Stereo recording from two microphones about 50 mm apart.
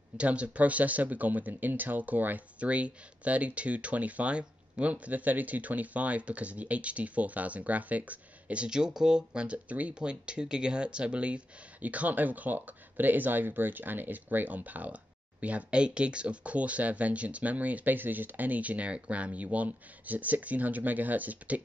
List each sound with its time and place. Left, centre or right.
0.2 s speech: right
8.6 s speech: centre; by 21.5 s right